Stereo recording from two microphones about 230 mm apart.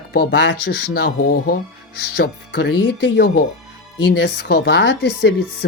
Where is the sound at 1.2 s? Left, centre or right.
Left.